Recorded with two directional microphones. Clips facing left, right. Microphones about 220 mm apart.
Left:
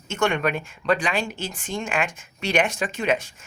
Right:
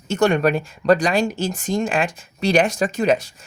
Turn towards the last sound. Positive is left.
turn(degrees=-40)  # may be behind; listen again after turning